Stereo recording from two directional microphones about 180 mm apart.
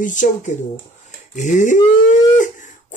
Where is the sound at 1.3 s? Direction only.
45° left (ahead or behind).